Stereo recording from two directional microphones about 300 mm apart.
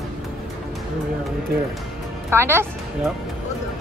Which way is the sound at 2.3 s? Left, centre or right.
Centre.